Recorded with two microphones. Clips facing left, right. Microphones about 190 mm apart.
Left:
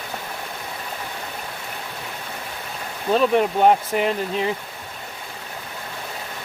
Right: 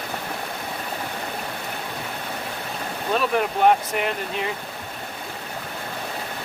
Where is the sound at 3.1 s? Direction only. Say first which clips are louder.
Left 5 dB; 30° left (ahead or behind).